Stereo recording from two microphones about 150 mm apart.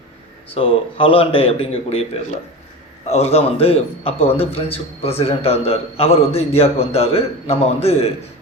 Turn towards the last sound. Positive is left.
turn(degrees=45)  # may be behind; listen again after turning